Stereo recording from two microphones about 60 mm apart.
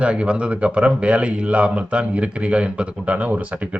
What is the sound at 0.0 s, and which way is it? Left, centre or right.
Speech, centre.